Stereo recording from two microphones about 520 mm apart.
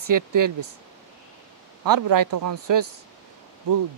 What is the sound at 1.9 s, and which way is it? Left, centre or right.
Speech, right.